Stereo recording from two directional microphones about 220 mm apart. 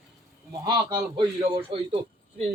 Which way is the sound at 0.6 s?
20° right (ahead or behind).